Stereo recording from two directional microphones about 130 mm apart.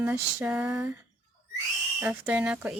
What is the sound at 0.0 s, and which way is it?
Speech, 15° right (ahead or behind).